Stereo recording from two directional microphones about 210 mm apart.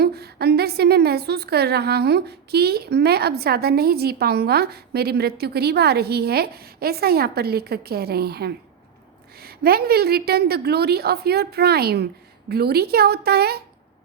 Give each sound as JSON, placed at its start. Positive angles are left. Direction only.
{"t": 0.0, "sound": "a woman's voice", "side_deg": -50}